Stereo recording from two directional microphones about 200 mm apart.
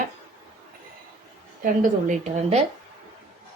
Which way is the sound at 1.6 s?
40° right (ahead or behind).